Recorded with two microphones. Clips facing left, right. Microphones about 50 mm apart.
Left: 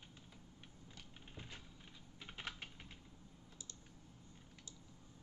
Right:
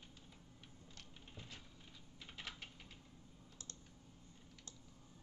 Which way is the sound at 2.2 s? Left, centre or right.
Left.